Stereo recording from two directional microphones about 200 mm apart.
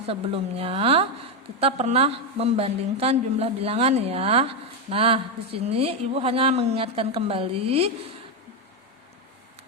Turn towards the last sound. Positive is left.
turn(degrees=-30)  # may be behind; listen again after turning